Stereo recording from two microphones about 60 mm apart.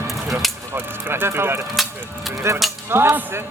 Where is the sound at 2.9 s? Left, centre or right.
Right.